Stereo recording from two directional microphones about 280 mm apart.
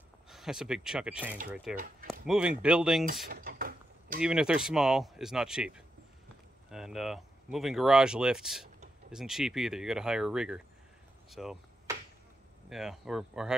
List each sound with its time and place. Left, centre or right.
0.3 s speech: centre
3.3 s mechanisms: right
4.2 s speech: centre
11.2 s chop: centre
12.6 s speech: centre